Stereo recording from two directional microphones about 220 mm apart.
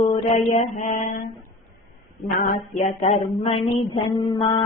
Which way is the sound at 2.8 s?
30° left (ahead or behind).